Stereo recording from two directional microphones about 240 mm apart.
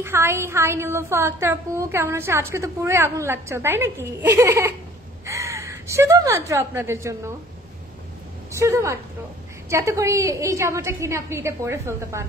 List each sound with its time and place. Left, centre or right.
0.0 s a woman's voice: centre
8.5 s a woman's voice: centre